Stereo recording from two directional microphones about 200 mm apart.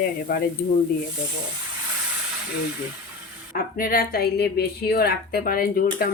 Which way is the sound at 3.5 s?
45° left (ahead or behind).